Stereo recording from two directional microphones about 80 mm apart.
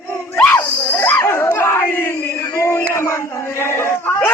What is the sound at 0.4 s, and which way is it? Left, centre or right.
Battle cry, left.